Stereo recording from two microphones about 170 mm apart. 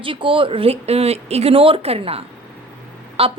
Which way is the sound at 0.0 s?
30° right (ahead or behind).